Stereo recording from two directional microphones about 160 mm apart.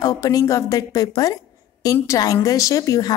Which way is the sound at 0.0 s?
20° left (ahead or behind).